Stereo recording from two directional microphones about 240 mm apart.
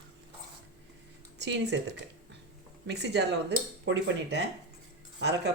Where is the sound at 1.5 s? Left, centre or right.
Right.